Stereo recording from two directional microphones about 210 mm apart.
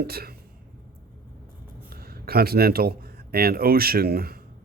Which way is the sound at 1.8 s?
45° right (ahead or behind).